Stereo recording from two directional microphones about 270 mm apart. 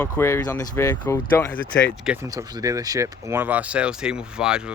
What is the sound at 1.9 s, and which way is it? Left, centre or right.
Speech, centre.